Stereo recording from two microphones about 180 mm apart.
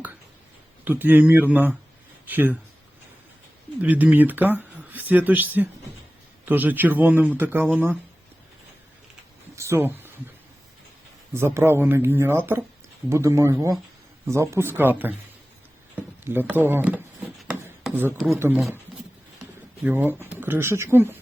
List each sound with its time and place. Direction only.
0.9 s speech: 10° right (ahead or behind)
3.8 s speech: 10° right (ahead or behind)
9.6 s speech: 15° right (ahead or behind)
11.3 s speech: 15° right (ahead or behind)
17.8 s a sound: 10° right (ahead or behind)
18.3 s speech: 10° right (ahead or behind)
19.8 s speech: 10° right (ahead or behind)